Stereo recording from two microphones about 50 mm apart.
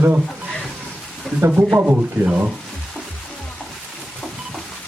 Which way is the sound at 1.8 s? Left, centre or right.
Right.